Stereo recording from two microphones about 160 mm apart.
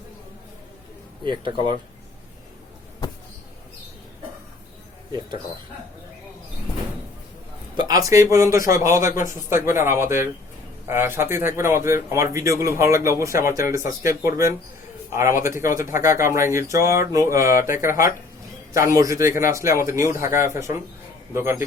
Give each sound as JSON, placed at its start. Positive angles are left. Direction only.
{"t": 1.2, "sound": "a man's voice", "side_deg": -30}
{"t": 7.8, "sound": "a man's voice", "side_deg": -25}
{"t": 9.0, "sound": "a man's voice", "side_deg": 50}
{"t": 9.5, "sound": "a man's voice", "side_deg": -15}
{"t": 18.7, "sound": "a man's voice", "side_deg": -20}